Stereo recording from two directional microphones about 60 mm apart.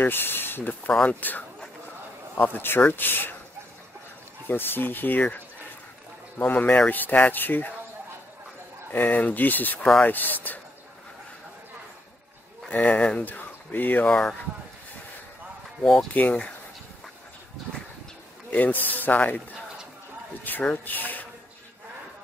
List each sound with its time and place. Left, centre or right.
0.0 s speech: left
4.5 s speech: left
8.9 s speech: left
12.6 s speech: left
14.0 s speech: centre
15.8 s speech: centre
16.1 s speech: left
18.5 s speech: left
20.7 s speech: left